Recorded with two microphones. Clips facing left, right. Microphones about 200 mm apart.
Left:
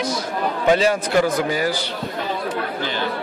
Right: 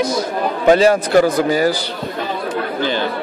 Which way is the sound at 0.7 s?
40° right (ahead or behind).